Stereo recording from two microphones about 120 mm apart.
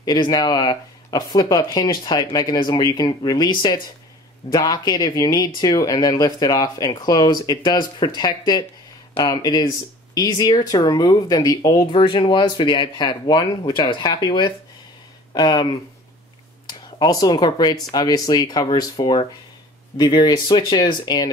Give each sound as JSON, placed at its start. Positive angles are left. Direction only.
{"t": 0.0, "sound": "speech", "side_deg": 35}